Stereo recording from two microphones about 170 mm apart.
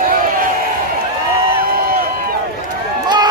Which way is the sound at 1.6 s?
60° right (ahead or behind).